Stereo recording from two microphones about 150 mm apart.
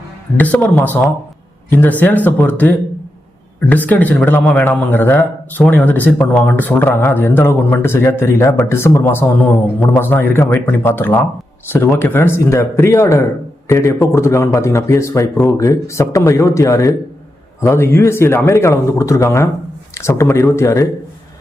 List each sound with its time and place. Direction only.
0.3 s a man's voice: 10° left (ahead or behind)